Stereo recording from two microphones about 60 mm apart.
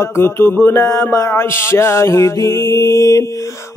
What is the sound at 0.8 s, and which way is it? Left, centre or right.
Music, left.